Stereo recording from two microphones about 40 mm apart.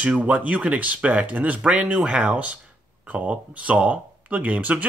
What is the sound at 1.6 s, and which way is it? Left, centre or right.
Speech, right.